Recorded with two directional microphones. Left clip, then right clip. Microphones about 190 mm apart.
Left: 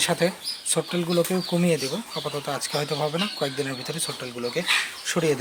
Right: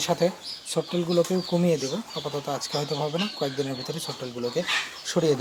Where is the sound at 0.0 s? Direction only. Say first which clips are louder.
Left 1 dB; centre (ahead or behind).